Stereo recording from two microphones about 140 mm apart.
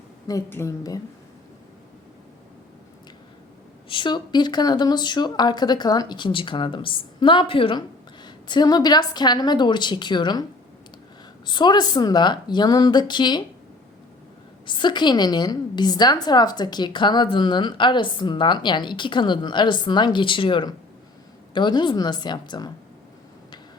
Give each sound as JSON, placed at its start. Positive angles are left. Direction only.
{"t": 0.3, "sound": "speech", "side_deg": 20}
{"t": 3.8, "sound": "speech", "side_deg": 35}
{"t": 11.4, "sound": "speech", "side_deg": 30}
{"t": 14.7, "sound": "speech", "side_deg": 35}